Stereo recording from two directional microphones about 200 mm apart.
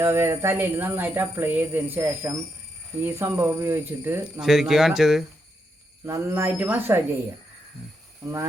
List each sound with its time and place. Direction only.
0.0 s speech: 15° right (ahead or behind)
6.1 s speech: 15° right (ahead or behind)
8.2 s speech: 15° right (ahead or behind)